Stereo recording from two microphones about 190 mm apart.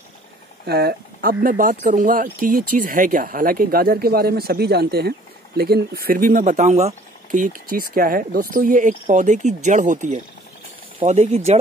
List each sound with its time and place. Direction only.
0.7 s speech: 55° right (ahead or behind); by 11.5 s 35° right (ahead or behind)